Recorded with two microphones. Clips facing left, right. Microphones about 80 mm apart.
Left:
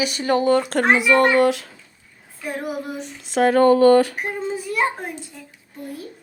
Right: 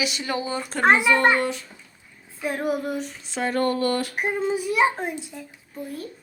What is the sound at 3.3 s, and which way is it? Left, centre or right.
Speech, left.